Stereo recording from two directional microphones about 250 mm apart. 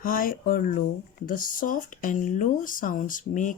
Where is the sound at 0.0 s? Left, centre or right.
Left.